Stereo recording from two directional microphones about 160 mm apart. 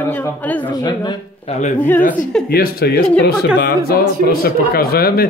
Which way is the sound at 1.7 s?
10° left (ahead or behind).